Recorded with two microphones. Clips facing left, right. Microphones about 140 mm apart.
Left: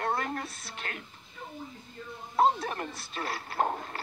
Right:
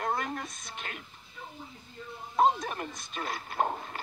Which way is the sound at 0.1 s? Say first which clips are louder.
Left 1 dB; 15° right (ahead or behind).